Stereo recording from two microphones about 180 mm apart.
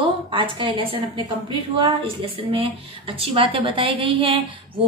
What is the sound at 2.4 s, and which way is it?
A woman's voice, 30° right (ahead or behind).